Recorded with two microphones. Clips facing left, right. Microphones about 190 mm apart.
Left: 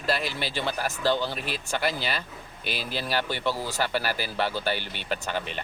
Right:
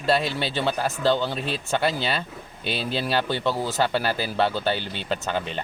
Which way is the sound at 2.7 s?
25° right (ahead or behind).